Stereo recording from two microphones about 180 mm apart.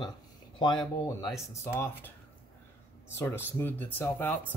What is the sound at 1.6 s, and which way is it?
Speech, 15° left (ahead or behind).